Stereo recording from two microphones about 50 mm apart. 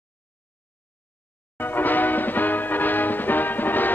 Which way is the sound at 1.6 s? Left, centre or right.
Left.